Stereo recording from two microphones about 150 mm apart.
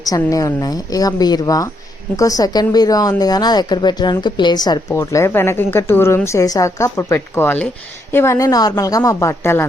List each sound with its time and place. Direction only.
0.0 s speech: 25° left (ahead or behind)